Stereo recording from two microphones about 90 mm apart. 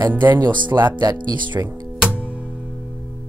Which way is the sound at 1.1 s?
60° right (ahead or behind).